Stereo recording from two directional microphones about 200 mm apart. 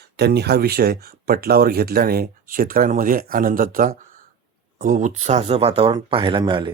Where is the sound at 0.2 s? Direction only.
55° right (ahead or behind).